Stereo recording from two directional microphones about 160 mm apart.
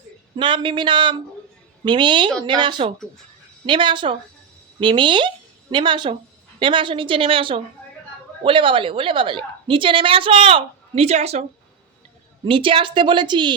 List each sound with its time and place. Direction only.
0.3 s a woman's voice: 30° right (ahead or behind)
12.5 s a woman's voice: 35° right (ahead or behind)